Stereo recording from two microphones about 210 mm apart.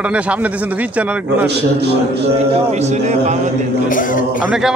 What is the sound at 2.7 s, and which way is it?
Speech, 30° right (ahead or behind).